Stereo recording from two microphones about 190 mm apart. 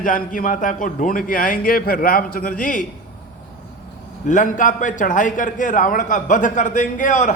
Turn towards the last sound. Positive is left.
turn(degrees=40)  # may be behind; listen again after turning